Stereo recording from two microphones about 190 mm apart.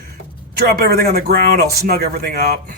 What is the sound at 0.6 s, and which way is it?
Speech, 55° right (ahead or behind).